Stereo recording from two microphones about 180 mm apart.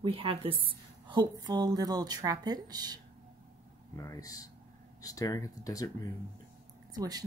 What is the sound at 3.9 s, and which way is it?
Speech, 15° left (ahead or behind).